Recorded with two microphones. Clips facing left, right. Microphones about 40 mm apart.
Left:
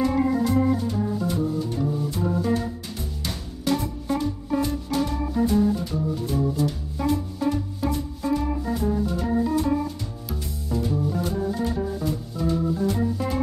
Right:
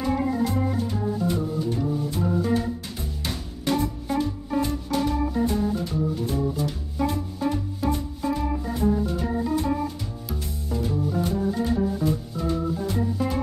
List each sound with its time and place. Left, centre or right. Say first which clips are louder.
0.0 s organ: left 2 dB; centre
4.1 s music: left 2 dB; centre
7.3 s organ: left 1 dB; centre
10.2 s music: even; centre